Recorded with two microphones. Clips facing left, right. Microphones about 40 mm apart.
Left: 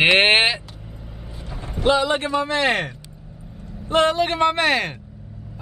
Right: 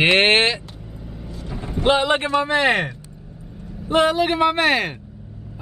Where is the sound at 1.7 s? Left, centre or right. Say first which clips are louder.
Right 1 dB; right.